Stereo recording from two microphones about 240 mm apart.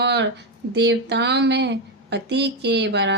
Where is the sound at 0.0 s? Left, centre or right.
Right.